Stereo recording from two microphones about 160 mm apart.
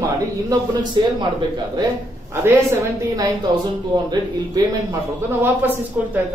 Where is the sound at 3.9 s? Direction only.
25° right (ahead or behind).